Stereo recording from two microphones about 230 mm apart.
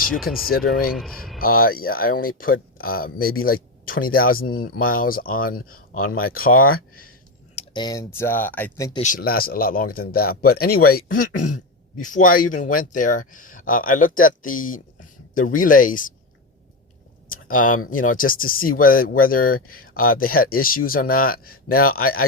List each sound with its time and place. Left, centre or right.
0.0 s speech: centre
1.4 s speech: left
7.5 s speech: left
8.9 s speech: left
17.3 s speech: left